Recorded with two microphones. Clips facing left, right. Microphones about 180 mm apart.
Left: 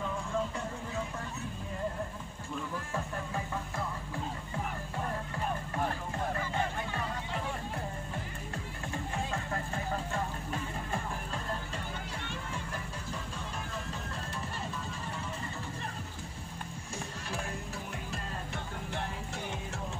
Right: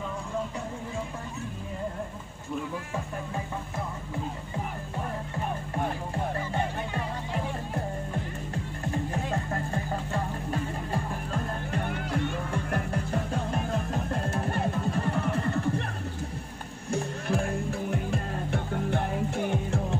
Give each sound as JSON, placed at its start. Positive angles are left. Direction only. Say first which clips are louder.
{"t": 11.7, "sound": "music", "louder": "right 10 dB", "side_deg": -65}
{"t": 16.9, "sound": "music", "louder": "right 12 dB", "side_deg": -55}